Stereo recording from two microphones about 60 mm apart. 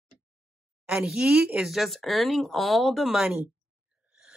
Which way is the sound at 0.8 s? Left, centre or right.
Centre.